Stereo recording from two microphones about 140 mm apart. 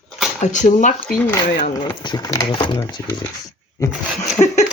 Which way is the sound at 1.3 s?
30° left (ahead or behind).